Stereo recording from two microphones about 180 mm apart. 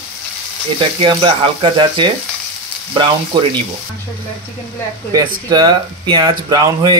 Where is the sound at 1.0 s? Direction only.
30° right (ahead or behind).